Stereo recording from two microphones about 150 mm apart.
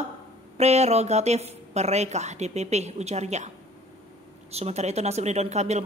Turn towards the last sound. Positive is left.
turn(degrees=-50)  # may be behind; listen again after turning